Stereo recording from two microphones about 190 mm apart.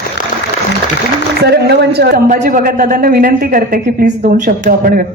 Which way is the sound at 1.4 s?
60° right (ahead or behind).